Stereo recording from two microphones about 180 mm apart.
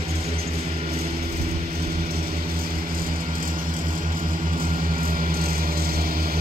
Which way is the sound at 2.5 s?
55° right (ahead or behind).